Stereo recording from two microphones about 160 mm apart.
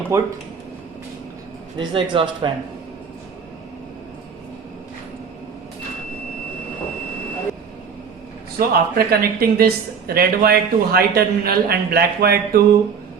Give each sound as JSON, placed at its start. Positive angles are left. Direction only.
{"t": 0.1, "sound": "speech", "side_deg": -20}
{"t": 1.8, "sound": "a man's voice", "side_deg": -35}
{"t": 8.5, "sound": "speech", "side_deg": -70}